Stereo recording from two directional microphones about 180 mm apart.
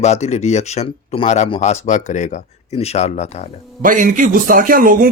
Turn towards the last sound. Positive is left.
turn(degrees=-50)  # may be behind; listen again after turning